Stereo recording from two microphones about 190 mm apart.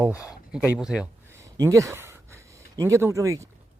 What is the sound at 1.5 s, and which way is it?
Speech, 15° right (ahead or behind).